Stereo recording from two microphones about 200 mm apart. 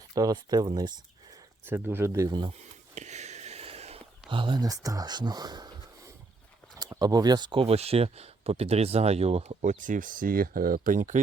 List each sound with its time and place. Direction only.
0.1 s speech: 20° right (ahead or behind)
2.9 s a sound: 35° right (ahead or behind); by 5.7 s 20° right (ahead or behind)
6.7 s speech: 20° right (ahead or behind); by 11.2 s 40° right (ahead or behind)